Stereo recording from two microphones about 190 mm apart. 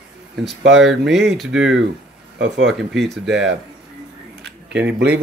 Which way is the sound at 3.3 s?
65° right (ahead or behind).